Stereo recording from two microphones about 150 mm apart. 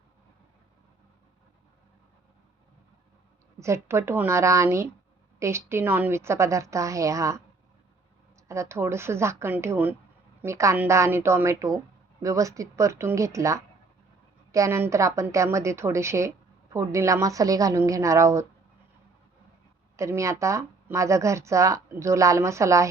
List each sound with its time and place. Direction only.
3.6 s speech: 20° right (ahead or behind)
8.4 s a woman's voice: 20° right (ahead or behind)
20.0 s speech: 20° right (ahead or behind)